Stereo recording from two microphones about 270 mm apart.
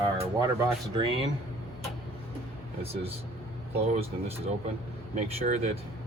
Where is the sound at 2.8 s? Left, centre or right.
Right.